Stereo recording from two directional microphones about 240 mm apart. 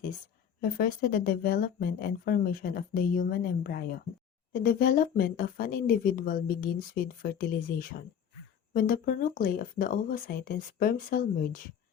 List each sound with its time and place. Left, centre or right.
0.6 s speech: left